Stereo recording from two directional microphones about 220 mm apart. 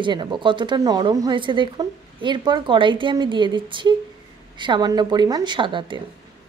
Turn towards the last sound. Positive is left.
turn(degrees=-20)  # may be behind; listen again after turning